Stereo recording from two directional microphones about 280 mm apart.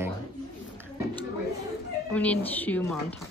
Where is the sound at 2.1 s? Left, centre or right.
Centre.